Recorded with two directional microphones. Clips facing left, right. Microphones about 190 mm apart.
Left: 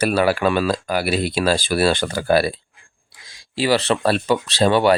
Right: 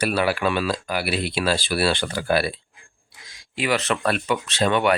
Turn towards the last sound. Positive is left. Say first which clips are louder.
# left 4 dB
turn(degrees=35)  # may be behind; listen again after turning